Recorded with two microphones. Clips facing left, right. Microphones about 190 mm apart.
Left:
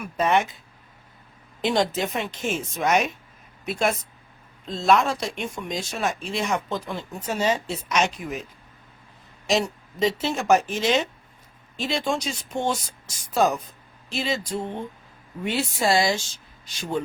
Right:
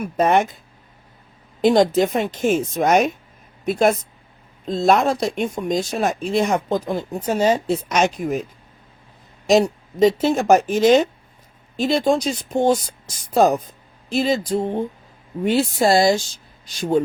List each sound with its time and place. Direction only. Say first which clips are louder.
0.0 s speech: right 5 dB; 45° right (ahead or behind)
1.6 s speech: right 8 dB; 40° right (ahead or behind)
9.5 s speech: right 8 dB; 45° right (ahead or behind)